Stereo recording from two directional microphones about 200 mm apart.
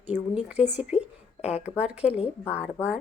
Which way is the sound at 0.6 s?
35° left (ahead or behind).